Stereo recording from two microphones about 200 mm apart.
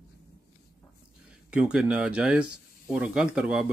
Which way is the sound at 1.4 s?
5° right (ahead or behind).